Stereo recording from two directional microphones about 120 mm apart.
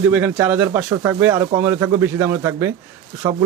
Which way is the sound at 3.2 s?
35° right (ahead or behind).